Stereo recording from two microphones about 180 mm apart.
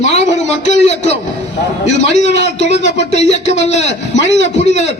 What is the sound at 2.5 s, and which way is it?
A man's voice, 35° left (ahead or behind).